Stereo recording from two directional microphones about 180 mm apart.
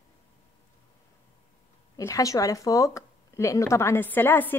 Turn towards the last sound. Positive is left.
turn(degrees=10)  # may be behind; listen again after turning